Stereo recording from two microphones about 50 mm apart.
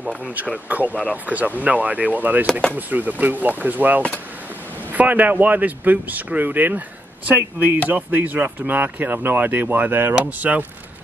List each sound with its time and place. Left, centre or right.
0.7 s speech: right
7.9 s speech: right
10.4 s speech: right